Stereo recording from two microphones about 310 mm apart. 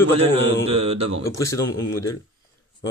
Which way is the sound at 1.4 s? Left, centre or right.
Centre.